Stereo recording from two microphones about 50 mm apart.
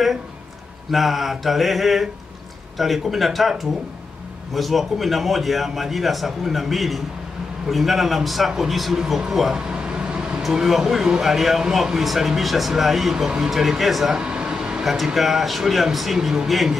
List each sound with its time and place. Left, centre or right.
0.9 s speech: centre
9.7 s air conditioning: centre
10.4 s speech: centre
14.2 s air conditioning: centre
15.1 s speech: centre